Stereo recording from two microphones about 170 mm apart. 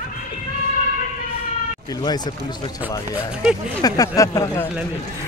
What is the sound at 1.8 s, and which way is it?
Speech, 25° left (ahead or behind).